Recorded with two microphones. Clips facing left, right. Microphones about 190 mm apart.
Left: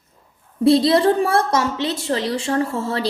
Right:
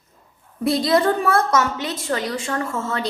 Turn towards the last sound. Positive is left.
turn(degrees=30)  # may be behind; listen again after turning